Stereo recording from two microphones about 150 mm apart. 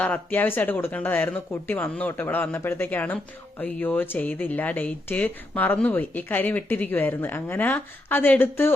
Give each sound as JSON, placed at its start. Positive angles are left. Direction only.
{"t": 0.0, "sound": "speech", "side_deg": 10}